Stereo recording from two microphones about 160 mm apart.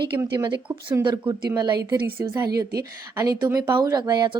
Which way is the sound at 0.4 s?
30° right (ahead or behind).